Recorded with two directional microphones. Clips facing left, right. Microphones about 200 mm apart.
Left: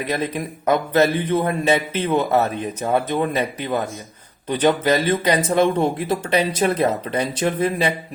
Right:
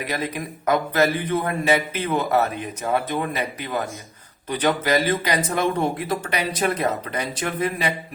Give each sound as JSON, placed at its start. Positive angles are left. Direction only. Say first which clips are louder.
{"t": 0.6, "sound": "speech", "louder": "left 3 dB", "side_deg": 25}
{"t": 4.4, "sound": "speech", "louder": "left 4 dB", "side_deg": 25}